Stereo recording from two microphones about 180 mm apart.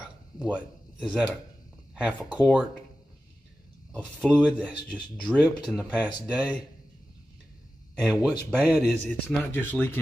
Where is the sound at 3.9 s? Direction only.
5° left (ahead or behind).